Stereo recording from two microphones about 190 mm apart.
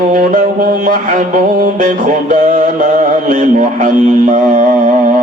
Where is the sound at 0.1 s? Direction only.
45° right (ahead or behind).